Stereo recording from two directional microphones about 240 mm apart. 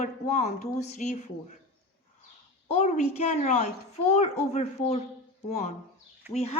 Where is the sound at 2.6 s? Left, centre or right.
Left.